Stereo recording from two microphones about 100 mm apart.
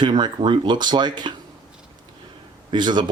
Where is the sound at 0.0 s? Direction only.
50° right (ahead or behind).